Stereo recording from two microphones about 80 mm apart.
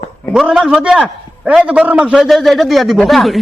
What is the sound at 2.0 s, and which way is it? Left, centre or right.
A man's voice, centre.